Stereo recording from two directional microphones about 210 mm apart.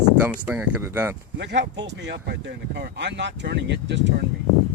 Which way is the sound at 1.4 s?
55° right (ahead or behind).